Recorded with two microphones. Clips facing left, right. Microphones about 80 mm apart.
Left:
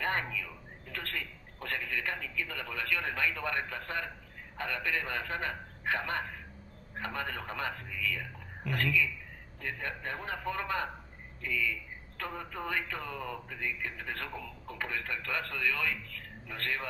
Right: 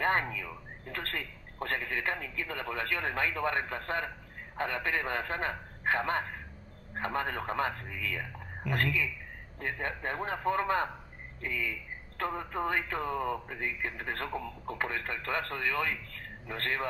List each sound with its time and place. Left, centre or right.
0.0 s a man's voice: right